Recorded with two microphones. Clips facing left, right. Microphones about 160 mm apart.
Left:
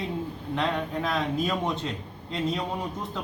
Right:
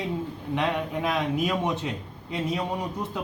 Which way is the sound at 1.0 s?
10° right (ahead or behind).